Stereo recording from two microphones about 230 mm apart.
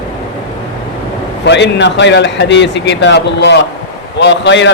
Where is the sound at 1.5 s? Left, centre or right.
Left.